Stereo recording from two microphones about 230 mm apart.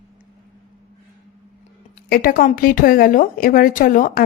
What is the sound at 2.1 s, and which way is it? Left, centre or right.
A woman's voice, left.